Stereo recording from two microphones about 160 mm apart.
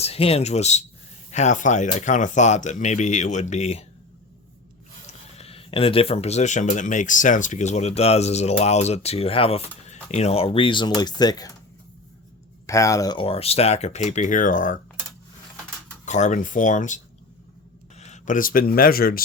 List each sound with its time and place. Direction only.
0.0 s speech: 40° left (ahead or behind)
5.0 s speech: 40° left (ahead or behind); by 11.5 s 25° left (ahead or behind)
12.6 s speech: 20° left (ahead or behind); by 14.8 s 55° left (ahead or behind)
16.0 s speech: 50° left (ahead or behind); by 19.2 s 70° left (ahead or behind)